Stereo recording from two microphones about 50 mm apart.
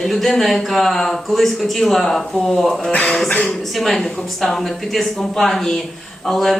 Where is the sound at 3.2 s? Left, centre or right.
Left.